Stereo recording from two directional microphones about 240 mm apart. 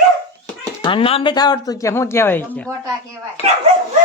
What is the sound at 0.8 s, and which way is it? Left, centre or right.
Speech, left.